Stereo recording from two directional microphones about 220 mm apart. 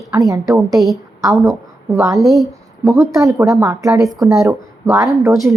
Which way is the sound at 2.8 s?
15° right (ahead or behind).